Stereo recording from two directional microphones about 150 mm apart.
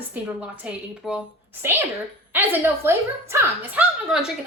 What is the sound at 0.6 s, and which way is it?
A woman's voice, 5° right (ahead or behind).